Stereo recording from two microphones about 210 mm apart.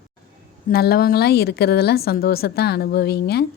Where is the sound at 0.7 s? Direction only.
50° left (ahead or behind).